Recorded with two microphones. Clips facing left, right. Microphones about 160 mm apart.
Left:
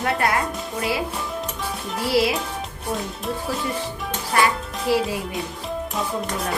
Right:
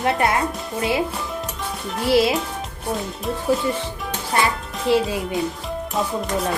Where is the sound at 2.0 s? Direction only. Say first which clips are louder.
Right 3 dB; 25° right (ahead or behind).